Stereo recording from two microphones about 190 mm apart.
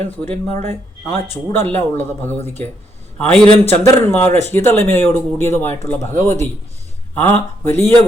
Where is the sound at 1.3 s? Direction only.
10° left (ahead or behind).